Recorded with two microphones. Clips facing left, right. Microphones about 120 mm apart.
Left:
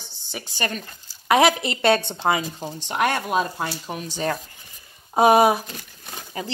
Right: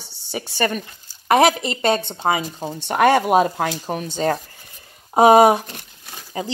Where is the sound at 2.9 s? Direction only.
60° right (ahead or behind).